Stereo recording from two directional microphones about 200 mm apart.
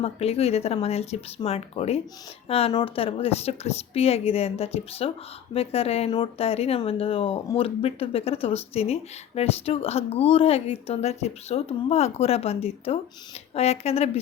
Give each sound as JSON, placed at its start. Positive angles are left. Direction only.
{"t": 0.0, "sound": "speech", "side_deg": 30}